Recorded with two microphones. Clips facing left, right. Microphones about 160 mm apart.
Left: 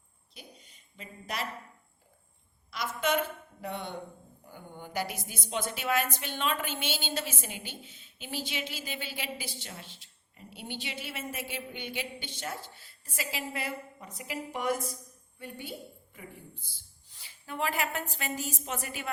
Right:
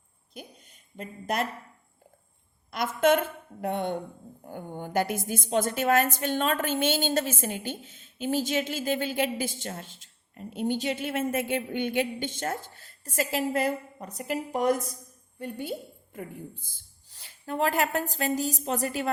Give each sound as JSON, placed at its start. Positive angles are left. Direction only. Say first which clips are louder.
{"t": 0.3, "sound": "a sound", "louder": "right 7 dB", "side_deg": -50}
{"t": 2.6, "sound": "a woman's voice", "louder": "right 8 dB", "side_deg": -50}
{"t": 16.1, "sound": "a woman's voice", "louder": "right 11 dB", "side_deg": -45}